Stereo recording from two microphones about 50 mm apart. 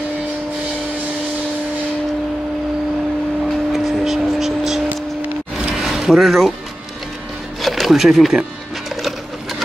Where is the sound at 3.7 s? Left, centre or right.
Centre.